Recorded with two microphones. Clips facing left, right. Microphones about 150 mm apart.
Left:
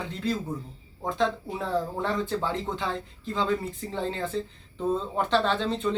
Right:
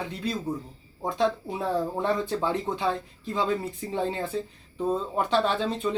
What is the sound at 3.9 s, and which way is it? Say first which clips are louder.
Speech: right 2 dB; 15° right (ahead or behind).